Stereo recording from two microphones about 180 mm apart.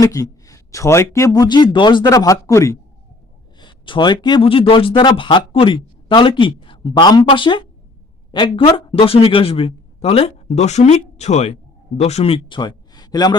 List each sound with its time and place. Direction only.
0.0 s speech: 20° left (ahead or behind)